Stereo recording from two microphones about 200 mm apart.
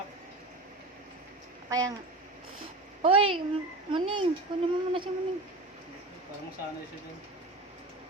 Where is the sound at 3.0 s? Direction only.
25° right (ahead or behind).